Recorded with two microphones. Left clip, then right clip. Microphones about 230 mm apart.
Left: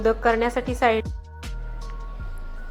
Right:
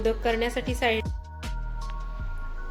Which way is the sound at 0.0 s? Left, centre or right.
Centre.